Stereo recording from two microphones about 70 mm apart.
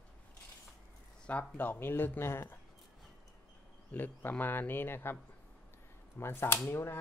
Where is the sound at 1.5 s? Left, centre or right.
Left.